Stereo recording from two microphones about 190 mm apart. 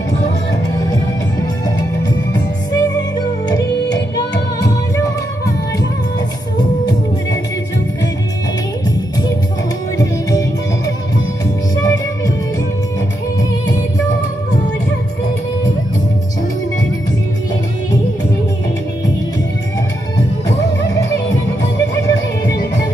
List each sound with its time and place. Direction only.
2.0 s music: 20° left (ahead or behind)
11.7 s music: 20° left (ahead or behind)